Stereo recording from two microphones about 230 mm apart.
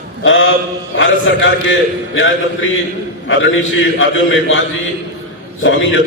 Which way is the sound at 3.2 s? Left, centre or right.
Left.